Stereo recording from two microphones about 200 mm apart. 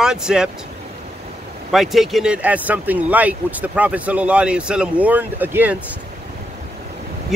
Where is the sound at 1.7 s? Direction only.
Centre (ahead or behind).